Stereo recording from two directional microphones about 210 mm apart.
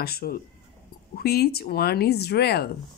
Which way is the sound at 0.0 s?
45° left (ahead or behind).